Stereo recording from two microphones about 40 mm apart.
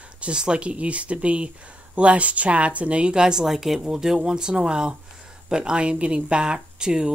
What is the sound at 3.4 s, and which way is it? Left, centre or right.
Speech, centre.